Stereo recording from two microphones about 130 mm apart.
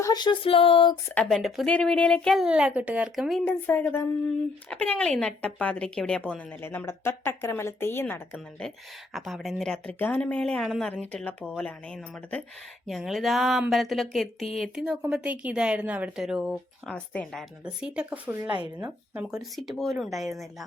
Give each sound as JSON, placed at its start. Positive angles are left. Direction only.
{"t": 0.0, "sound": "a sound", "side_deg": 30}
{"t": 1.1, "sound": "speech", "side_deg": 5}
{"t": 3.4, "sound": "a woman's voice", "side_deg": 15}
{"t": 17.7, "sound": "speech", "side_deg": -10}